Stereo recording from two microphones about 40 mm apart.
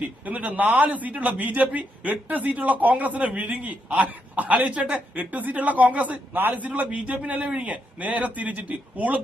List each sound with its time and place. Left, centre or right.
0.3 s a man's voice: right
6.3 s a man's voice: right